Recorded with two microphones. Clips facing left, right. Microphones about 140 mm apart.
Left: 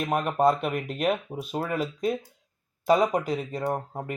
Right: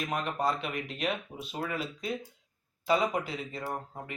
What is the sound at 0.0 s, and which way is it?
Speech, 50° left (ahead or behind).